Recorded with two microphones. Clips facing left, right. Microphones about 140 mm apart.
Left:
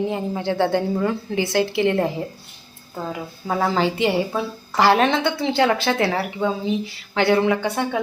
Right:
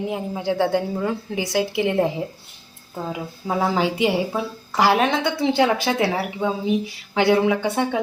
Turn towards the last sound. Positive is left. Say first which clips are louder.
# even
turn(degrees=-5)  # may be behind; listen again after turning